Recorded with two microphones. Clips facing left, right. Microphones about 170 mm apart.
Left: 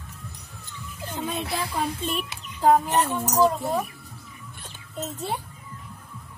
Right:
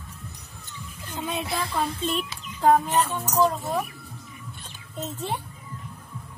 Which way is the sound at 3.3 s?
5° left (ahead or behind).